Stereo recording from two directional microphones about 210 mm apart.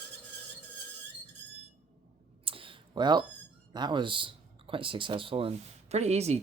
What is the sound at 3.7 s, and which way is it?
Speech, 20° right (ahead or behind).